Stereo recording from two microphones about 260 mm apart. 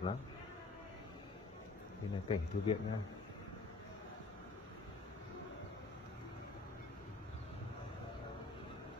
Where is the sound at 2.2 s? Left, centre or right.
Centre.